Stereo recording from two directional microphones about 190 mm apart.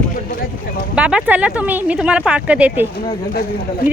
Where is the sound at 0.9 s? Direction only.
5° right (ahead or behind).